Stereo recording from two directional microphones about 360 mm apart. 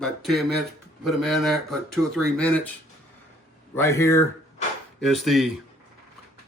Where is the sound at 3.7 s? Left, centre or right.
Centre.